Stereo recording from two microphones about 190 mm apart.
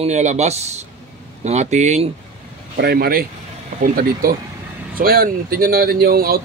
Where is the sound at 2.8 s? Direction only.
55° right (ahead or behind).